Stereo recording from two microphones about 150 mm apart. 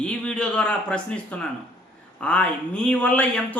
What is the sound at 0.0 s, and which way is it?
Speech, 5° left (ahead or behind).